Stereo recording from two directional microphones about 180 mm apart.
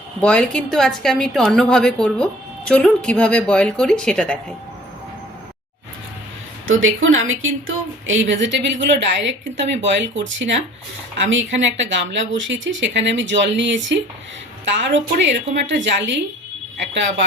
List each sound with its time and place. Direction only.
0.2 s a woman's voice: 5° left (ahead or behind)
6.7 s speech: 90° right